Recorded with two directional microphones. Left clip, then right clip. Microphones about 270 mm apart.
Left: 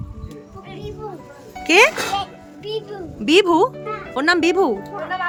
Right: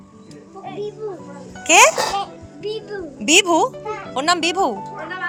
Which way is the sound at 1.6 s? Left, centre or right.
Centre.